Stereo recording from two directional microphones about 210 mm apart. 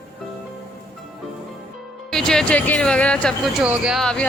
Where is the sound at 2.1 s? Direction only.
Centre (ahead or behind).